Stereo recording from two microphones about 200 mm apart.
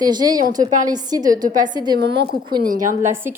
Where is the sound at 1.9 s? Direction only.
55° right (ahead or behind).